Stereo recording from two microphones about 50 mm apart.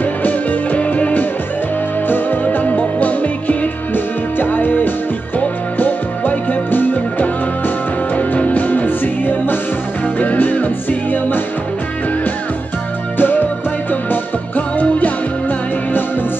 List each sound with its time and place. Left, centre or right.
0.0 s music: left
2.0 s music: left
13.2 s music: left
14.8 s music: left